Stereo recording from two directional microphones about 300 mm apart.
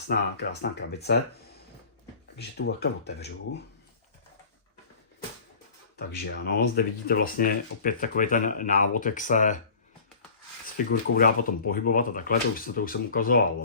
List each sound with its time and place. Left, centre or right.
0.1 s speech: left
2.4 s speech: left
6.0 s speech: left
10.8 s speech: left